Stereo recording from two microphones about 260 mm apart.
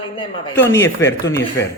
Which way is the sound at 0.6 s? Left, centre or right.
Centre.